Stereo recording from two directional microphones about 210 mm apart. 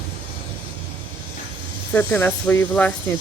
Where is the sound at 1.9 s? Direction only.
10° left (ahead or behind).